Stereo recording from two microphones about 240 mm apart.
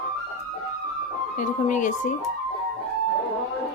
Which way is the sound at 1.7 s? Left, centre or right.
Left.